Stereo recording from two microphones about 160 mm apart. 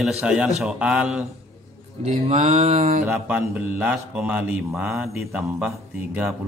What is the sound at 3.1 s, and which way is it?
Mantra, 10° right (ahead or behind).